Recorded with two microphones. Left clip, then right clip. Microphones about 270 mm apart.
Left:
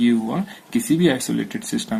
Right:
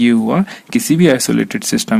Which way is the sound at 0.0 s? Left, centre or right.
Right.